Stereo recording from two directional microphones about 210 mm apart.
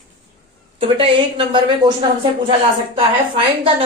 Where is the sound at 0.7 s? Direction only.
25° right (ahead or behind).